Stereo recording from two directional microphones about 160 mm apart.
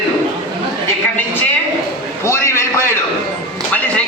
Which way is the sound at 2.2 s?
15° left (ahead or behind).